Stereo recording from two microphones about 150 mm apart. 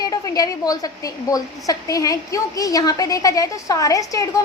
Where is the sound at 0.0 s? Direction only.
25° left (ahead or behind).